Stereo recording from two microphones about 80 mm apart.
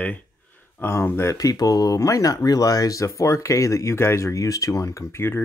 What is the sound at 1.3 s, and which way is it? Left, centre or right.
Speech, left.